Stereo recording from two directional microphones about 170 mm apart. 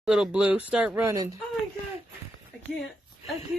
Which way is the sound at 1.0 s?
20° right (ahead or behind).